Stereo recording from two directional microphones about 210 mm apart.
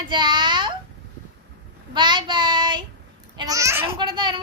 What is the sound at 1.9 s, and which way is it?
Child singing, 20° right (ahead or behind).